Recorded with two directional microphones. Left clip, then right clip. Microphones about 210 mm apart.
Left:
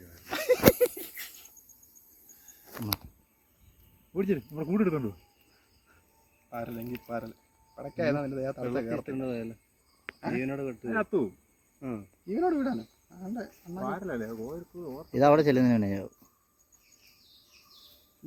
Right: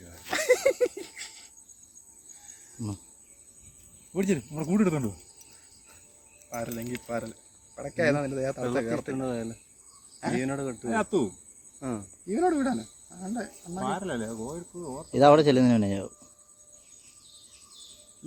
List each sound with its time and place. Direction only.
0.3 s a sound: 5° right (ahead or behind)
4.1 s speech: 50° right (ahead or behind)
6.5 s speech: 10° right (ahead or behind); by 10.8 s 30° right (ahead or behind)
10.8 s speech: 50° right (ahead or behind)
11.8 s speech: 30° right (ahead or behind)
12.3 s speech: 5° right (ahead or behind)
13.8 s speech: 45° right (ahead or behind)
15.1 s speech: centre (ahead or behind)